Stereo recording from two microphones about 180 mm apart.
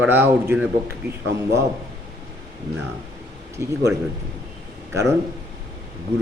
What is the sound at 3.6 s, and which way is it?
Speech, 15° right (ahead or behind).